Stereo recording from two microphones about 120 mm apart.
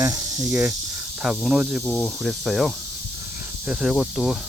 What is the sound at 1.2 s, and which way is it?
Speech, 5° right (ahead or behind).